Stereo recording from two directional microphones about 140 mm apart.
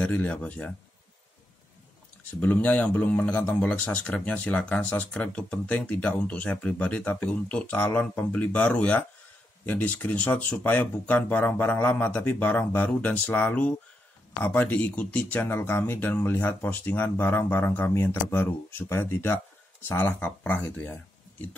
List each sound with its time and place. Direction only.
0.0 s speech: 10° left (ahead or behind)
2.4 s speech: 10° left (ahead or behind)